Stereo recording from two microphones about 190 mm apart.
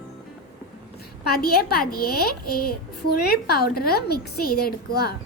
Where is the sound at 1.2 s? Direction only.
55° left (ahead or behind).